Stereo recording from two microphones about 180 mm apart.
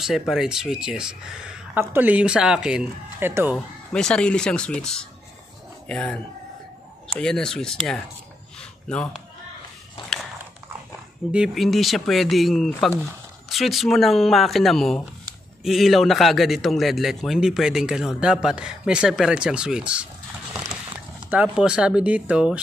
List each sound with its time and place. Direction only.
0.0 s a man's voice: centre (ahead or behind)
3.5 s a man's voice: 5° left (ahead or behind)
8.5 s a sound: 5° left (ahead or behind)
11.3 s a man's voice: centre (ahead or behind)
20.5 s clip-clop: 20° right (ahead or behind)
21.3 s a man's voice: 5° right (ahead or behind)